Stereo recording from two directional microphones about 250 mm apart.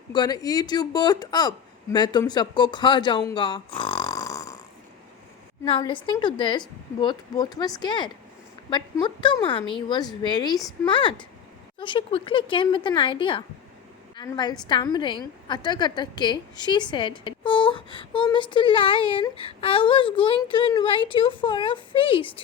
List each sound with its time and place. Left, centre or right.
0.1 s speech: centre
5.6 s a woman's voice: left